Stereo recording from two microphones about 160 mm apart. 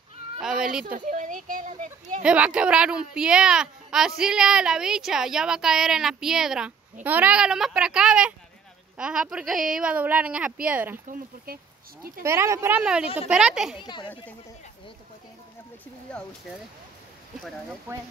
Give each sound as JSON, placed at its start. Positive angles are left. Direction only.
{"t": 0.4, "sound": "a sound", "side_deg": -5}
{"t": 0.8, "sound": "speech", "side_deg": -55}
{"t": 2.2, "sound": "speech", "side_deg": -5}
{"t": 11.1, "sound": "speech", "side_deg": -65}
{"t": 12.0, "sound": "speech", "side_deg": -15}
{"t": 12.7, "sound": "speech", "side_deg": -5}
{"t": 13.7, "sound": "speech", "side_deg": 30}
{"t": 16.1, "sound": "speech", "side_deg": 5}